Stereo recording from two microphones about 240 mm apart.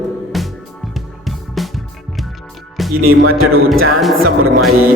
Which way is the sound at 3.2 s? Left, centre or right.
Right.